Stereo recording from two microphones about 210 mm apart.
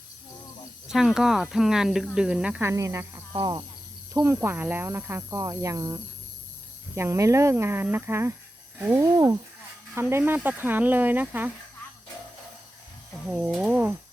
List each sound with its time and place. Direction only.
0.9 s speech: centre (ahead or behind)
13.3 s speech: centre (ahead or behind)